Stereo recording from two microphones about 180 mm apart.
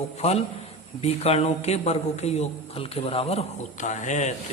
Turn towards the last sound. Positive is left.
turn(degrees=40)  # may be behind; listen again after turning